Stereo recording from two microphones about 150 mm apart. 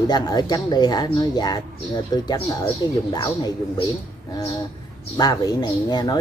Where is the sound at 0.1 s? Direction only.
25° left (ahead or behind).